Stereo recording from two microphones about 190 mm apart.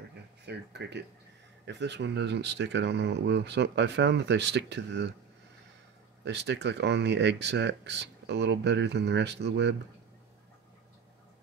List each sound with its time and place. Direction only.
0.5 s speech: 60° right (ahead or behind)
6.2 s speech: 65° right (ahead or behind)